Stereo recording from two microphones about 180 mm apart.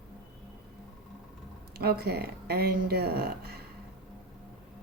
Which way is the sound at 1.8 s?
60° right (ahead or behind).